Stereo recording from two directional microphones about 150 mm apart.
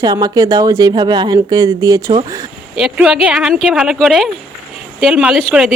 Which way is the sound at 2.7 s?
5° right (ahead or behind).